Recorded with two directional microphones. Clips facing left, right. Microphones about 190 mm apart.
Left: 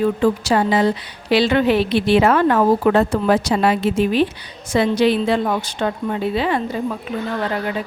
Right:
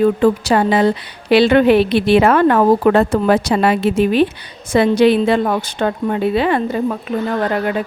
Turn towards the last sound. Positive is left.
turn(degrees=-55)  # may be behind; listen again after turning